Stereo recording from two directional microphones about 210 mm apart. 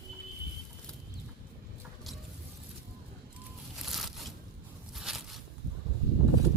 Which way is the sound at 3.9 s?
Centre (ahead or behind).